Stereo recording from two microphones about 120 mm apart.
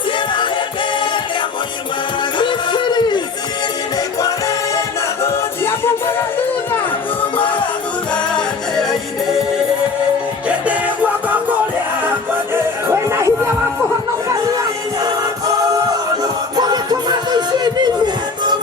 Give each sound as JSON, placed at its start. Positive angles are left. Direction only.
{"t": 2.4, "sound": "a sound", "side_deg": 40}
{"t": 5.2, "sound": "music", "side_deg": 20}
{"t": 8.4, "sound": "music", "side_deg": 5}
{"t": 10.5, "sound": "music", "side_deg": -10}
{"t": 12.9, "sound": "music", "side_deg": -20}
{"t": 16.6, "sound": "music", "side_deg": -35}